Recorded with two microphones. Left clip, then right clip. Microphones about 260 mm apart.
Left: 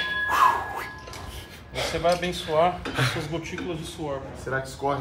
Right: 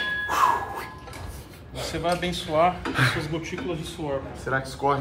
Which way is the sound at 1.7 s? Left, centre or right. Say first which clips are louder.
Left 3 dB; left.